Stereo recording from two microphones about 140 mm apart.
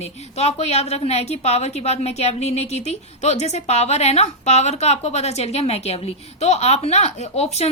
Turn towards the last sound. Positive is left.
turn(degrees=50)  # may be behind; listen again after turning